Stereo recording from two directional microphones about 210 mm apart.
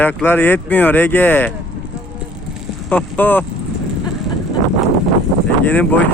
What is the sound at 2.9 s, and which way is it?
Speech, 5° left (ahead or behind).